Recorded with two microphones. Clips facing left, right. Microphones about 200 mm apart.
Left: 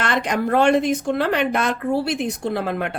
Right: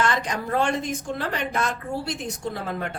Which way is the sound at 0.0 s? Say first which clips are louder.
Left 4 dB; 70° left (ahead or behind).